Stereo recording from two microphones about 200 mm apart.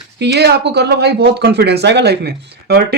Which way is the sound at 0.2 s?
55° right (ahead or behind).